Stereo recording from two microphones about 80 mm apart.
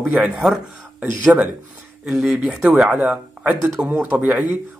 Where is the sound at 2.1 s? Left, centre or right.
Centre.